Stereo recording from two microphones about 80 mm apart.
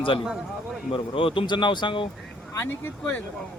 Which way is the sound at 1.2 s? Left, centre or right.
Left.